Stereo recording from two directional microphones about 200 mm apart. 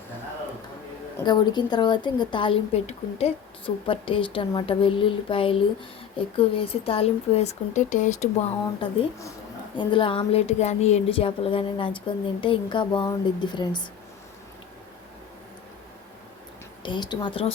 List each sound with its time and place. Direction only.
1.2 s a woman's voice: 20° left (ahead or behind); by 8.3 s 40° left (ahead or behind)
9.7 s a woman's voice: 25° left (ahead or behind)
16.8 s a woman's voice: 20° left (ahead or behind)